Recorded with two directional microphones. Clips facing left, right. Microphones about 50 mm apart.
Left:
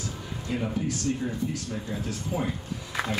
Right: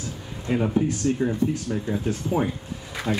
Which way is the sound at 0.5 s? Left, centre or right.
Right.